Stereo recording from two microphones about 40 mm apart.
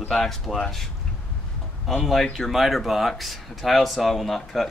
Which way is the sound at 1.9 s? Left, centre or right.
Centre.